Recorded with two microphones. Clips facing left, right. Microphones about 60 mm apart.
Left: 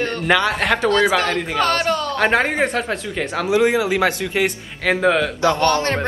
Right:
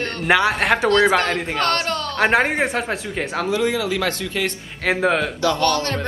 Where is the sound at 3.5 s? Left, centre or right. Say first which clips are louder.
Left 6 dB; left.